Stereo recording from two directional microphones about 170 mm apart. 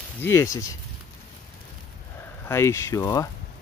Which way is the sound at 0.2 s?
15° left (ahead or behind).